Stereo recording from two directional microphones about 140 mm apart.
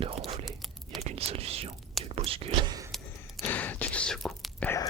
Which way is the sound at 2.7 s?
25° right (ahead or behind).